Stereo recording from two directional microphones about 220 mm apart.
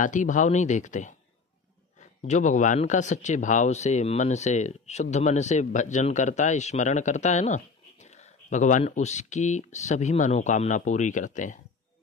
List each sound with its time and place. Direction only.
0.0 s speech: 35° left (ahead or behind)